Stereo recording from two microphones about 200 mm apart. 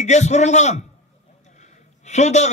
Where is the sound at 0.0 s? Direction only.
35° left (ahead or behind).